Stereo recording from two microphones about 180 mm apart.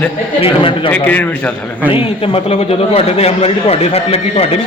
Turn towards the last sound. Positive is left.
turn(degrees=35)  # may be behind; listen again after turning